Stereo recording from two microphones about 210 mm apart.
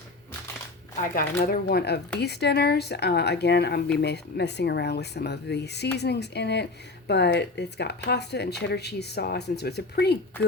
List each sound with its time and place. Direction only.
1.1 s speech: 45° left (ahead or behind)